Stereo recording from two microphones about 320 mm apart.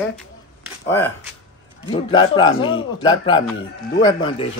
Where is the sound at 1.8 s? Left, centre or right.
Centre.